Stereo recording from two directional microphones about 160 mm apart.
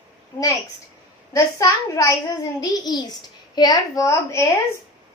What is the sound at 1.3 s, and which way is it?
A woman's voice, 20° left (ahead or behind).